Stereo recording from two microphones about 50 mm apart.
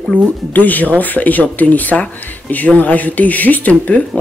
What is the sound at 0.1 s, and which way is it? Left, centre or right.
Speech, left.